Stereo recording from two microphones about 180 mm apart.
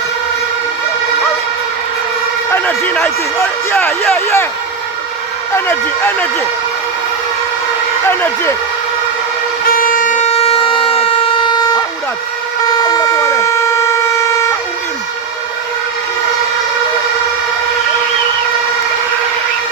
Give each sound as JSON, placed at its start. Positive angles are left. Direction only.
{"t": 2.5, "sound": "emergency vehicle", "side_deg": 10}
{"t": 3.7, "sound": "speech", "side_deg": 10}
{"t": 5.5, "sound": "speech", "side_deg": 10}
{"t": 8.0, "sound": "speech", "side_deg": 10}
{"t": 9.6, "sound": "vehicle", "side_deg": 50}
{"t": 12.8, "sound": "vehicle", "side_deg": 20}